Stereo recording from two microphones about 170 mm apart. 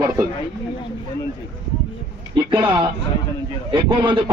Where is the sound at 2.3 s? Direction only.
25° right (ahead or behind).